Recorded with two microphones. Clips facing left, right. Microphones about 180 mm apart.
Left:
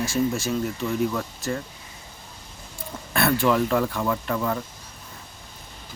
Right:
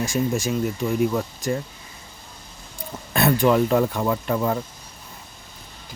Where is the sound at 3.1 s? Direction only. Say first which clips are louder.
Right 3 dB; 20° right (ahead or behind).